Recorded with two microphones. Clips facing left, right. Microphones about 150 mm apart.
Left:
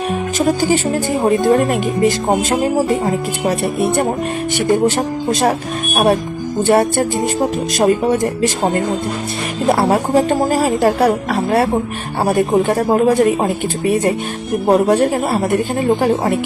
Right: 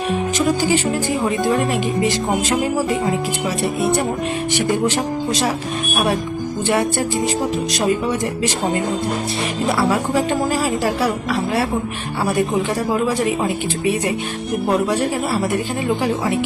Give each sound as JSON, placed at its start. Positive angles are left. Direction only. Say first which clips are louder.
{"t": 0.1, "sound": "speech", "louder": "left 1 dB", "side_deg": 45}